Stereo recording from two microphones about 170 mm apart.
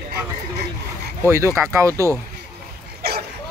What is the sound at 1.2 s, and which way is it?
Speech, 15° right (ahead or behind).